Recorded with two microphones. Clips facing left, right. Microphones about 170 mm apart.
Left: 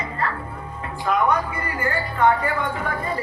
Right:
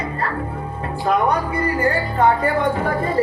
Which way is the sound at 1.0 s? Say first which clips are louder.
Right 2 dB; 35° right (ahead or behind).